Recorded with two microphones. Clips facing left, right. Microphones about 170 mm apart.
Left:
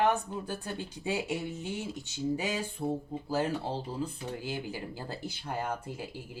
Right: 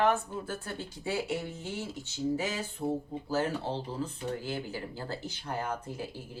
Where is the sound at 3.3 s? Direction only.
15° left (ahead or behind).